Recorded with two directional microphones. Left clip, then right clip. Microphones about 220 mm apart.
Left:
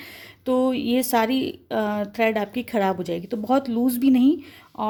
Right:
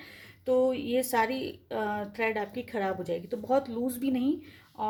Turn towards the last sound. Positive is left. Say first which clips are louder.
# left 11 dB
turn(degrees=45)  # may be behind; listen again after turning